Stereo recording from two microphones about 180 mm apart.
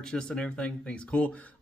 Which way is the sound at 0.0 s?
5° left (ahead or behind).